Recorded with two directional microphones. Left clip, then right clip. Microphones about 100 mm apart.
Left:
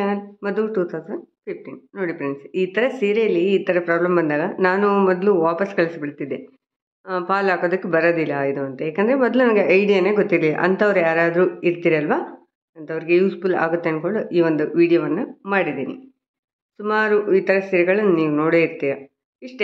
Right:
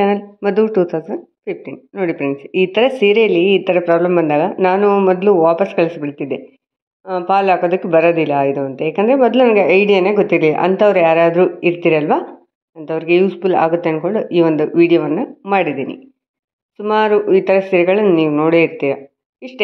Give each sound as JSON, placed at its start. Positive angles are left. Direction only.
{"t": 0.0, "sound": "speech", "side_deg": -60}
{"t": 3.6, "sound": "a woman's voice", "side_deg": -35}
{"t": 7.1, "sound": "a woman's voice", "side_deg": -20}